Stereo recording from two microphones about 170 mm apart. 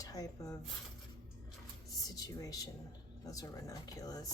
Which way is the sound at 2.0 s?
20° left (ahead or behind).